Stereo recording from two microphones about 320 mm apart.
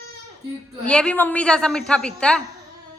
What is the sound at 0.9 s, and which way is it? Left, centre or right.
A woman's voice, centre.